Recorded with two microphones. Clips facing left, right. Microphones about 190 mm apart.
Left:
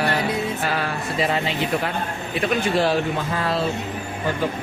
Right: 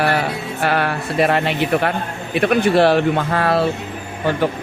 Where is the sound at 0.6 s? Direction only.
65° right (ahead or behind).